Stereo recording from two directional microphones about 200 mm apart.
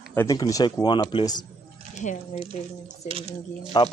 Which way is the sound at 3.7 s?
20° left (ahead or behind).